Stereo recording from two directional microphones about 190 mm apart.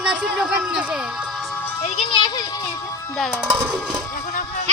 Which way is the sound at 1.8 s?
30° left (ahead or behind).